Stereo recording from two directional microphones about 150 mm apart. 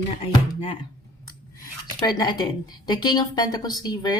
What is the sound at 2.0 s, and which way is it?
Speech, 25° left (ahead or behind).